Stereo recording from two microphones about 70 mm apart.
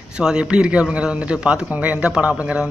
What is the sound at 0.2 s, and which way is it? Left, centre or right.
A man's voice, centre.